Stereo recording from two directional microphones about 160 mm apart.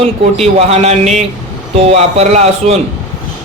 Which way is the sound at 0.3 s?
40° right (ahead or behind).